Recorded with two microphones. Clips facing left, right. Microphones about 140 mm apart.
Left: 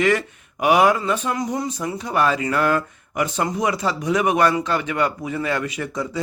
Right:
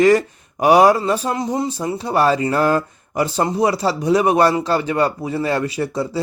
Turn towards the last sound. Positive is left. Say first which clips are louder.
# right 5 dB
turn(degrees=-35)  # may be behind; listen again after turning